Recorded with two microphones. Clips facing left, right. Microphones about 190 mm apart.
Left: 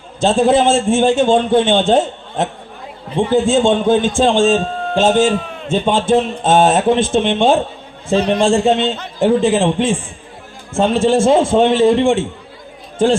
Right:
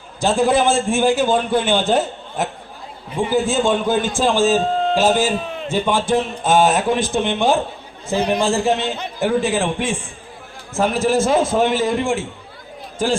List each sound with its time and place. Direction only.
0.2 s a man's voice: 25° left (ahead or behind)